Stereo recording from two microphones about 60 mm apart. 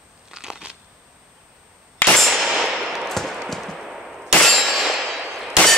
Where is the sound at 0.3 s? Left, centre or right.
Centre.